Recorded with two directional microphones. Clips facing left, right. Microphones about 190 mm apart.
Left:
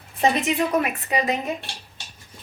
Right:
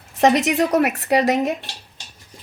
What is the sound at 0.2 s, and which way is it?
A woman's voice, 75° right (ahead or behind).